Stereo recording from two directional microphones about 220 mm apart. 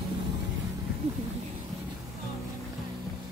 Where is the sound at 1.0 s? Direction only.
30° right (ahead or behind).